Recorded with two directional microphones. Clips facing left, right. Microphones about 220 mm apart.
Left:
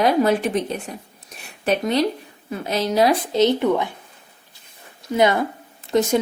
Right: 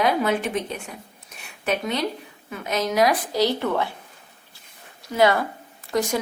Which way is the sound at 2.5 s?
30° left (ahead or behind).